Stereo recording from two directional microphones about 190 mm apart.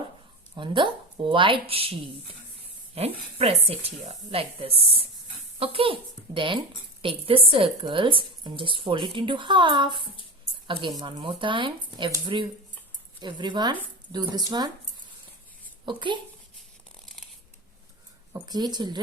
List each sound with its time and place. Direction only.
0.5 s a woman's voice: 25° right (ahead or behind)
15.9 s a woman's voice: 25° right (ahead or behind)
18.3 s a woman's voice: 20° right (ahead or behind)